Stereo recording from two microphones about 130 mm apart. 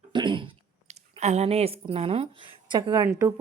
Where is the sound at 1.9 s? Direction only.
50° right (ahead or behind); by 3.3 s 25° right (ahead or behind).